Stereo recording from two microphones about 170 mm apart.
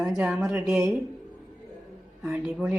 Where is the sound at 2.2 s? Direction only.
5° right (ahead or behind).